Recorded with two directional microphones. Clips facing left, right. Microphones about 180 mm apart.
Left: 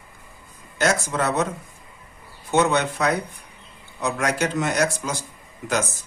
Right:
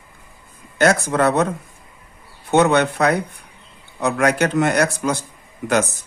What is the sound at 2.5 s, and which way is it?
Speech, 60° right (ahead or behind).